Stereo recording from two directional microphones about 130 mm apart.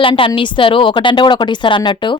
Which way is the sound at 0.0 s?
40° left (ahead or behind).